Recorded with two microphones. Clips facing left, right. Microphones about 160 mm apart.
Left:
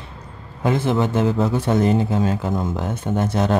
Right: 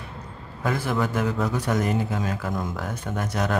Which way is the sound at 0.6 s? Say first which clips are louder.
Left 6 dB; 25° left (ahead or behind).